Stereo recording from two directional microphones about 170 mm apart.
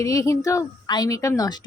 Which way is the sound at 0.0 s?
20° left (ahead or behind).